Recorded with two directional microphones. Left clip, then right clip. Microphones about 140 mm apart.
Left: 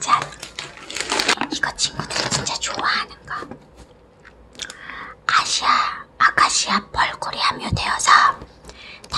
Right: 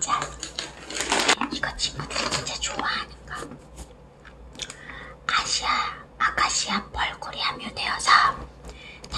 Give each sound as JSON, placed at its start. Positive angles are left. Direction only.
{"t": 0.1, "sound": "typing", "side_deg": 35}
{"t": 1.2, "sound": "crumpling", "side_deg": 65}
{"t": 1.5, "sound": "a sound", "side_deg": 25}
{"t": 4.6, "sound": "whispering", "side_deg": 25}